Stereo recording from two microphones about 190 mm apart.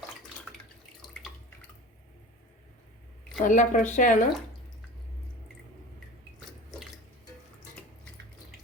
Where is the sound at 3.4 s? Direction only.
40° left (ahead or behind).